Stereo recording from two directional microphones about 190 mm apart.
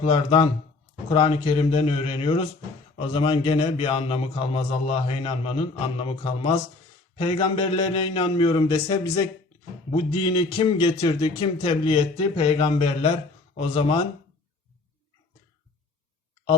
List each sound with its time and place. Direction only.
0.0 s a man's voice: 25° left (ahead or behind)